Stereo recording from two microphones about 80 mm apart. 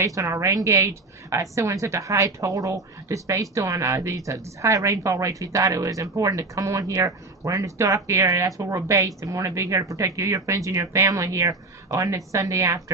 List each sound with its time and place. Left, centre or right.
0.0 s a woman's voice: right